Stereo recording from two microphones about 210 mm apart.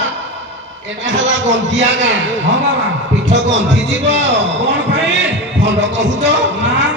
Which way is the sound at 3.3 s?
60° right (ahead or behind).